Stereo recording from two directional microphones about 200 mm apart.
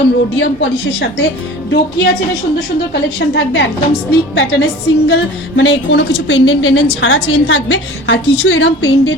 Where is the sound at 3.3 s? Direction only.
65° left (ahead or behind).